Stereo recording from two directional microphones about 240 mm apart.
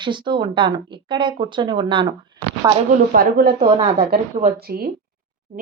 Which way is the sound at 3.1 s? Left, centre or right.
Right.